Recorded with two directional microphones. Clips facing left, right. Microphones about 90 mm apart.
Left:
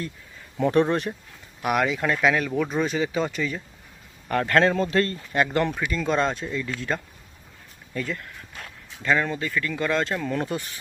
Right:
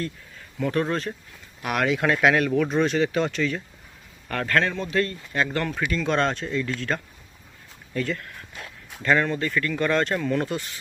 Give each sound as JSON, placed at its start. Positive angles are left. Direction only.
{"t": 0.6, "sound": "speech", "side_deg": 20}
{"t": 1.6, "sound": "speech", "side_deg": 5}
{"t": 4.3, "sound": "speech", "side_deg": 20}
{"t": 4.7, "sound": "speech", "side_deg": 40}
{"t": 5.3, "sound": "speech", "side_deg": 20}
{"t": 5.7, "sound": "speech", "side_deg": 5}